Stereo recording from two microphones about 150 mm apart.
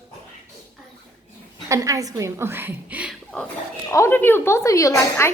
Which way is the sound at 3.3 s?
5° left (ahead or behind).